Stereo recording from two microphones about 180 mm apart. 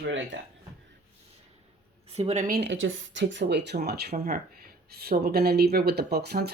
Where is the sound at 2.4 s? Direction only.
65° right (ahead or behind).